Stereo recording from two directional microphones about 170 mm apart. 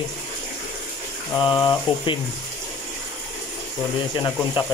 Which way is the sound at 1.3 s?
20° left (ahead or behind).